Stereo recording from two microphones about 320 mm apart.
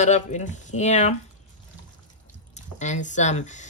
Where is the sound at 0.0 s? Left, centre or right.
Left.